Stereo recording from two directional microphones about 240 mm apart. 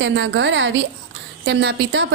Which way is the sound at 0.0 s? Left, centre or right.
Right.